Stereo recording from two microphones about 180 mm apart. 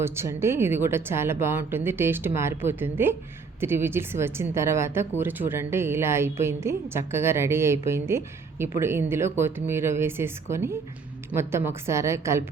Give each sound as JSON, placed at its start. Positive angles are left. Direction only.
{"t": 0.0, "sound": "a woman's voice", "side_deg": -15}